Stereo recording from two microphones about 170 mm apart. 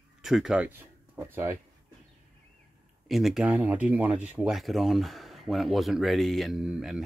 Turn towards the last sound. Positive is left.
turn(degrees=-5)  # may be behind; listen again after turning